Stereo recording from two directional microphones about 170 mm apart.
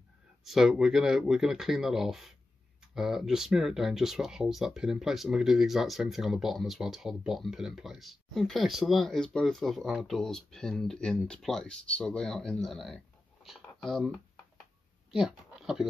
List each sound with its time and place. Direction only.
0.4 s speech: centre (ahead or behind)